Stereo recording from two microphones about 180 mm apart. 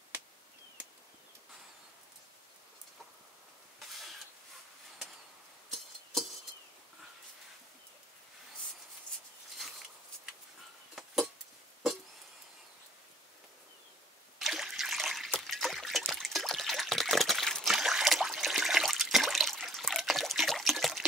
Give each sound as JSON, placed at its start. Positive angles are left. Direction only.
{"t": 14.4, "sound": "trickle", "side_deg": 0}